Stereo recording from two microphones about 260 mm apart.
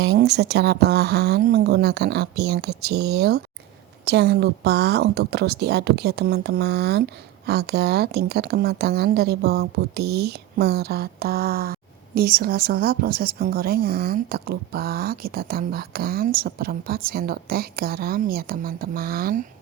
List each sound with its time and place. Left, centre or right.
0.0 s speech: right